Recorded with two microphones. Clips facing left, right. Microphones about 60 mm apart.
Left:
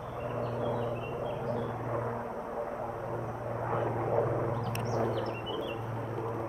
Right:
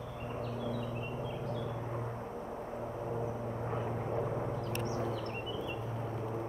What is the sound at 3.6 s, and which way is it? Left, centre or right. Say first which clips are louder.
Vehicle: left 7 dB; left.